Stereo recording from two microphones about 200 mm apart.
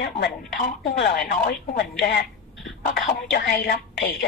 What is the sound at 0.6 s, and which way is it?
A woman's voice, 50° left (ahead or behind).